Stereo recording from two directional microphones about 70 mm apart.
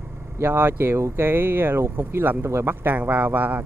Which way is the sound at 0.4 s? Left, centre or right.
Right.